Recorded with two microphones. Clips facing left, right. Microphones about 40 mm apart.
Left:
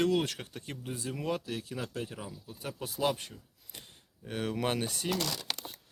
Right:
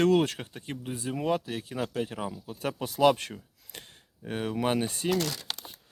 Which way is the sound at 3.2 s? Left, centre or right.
Right.